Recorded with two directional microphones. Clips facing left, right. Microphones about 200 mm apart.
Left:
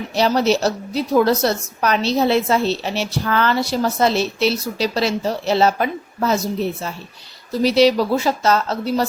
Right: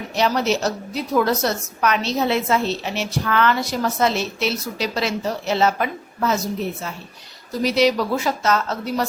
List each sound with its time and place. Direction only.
0.2 s a woman's voice: 35° left (ahead or behind)